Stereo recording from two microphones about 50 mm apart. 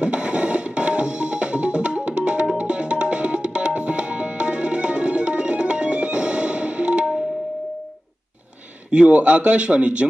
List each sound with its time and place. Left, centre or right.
0.0 s music: right
2.5 s tabla: right
8.9 s speech: right